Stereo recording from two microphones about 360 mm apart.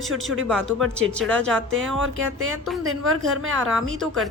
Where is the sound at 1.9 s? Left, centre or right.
Right.